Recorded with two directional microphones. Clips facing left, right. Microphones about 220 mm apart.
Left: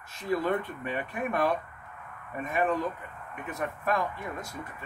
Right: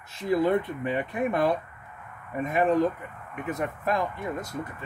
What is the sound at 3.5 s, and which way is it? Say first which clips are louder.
Speech: right 2 dB; 20° right (ahead or behind).